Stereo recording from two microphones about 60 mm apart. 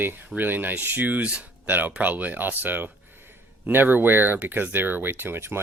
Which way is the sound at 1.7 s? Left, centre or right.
Right.